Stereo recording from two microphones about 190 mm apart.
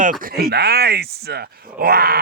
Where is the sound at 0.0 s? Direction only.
45° right (ahead or behind).